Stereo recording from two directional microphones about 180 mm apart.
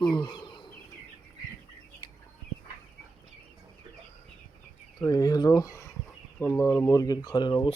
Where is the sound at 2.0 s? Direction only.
25° left (ahead or behind).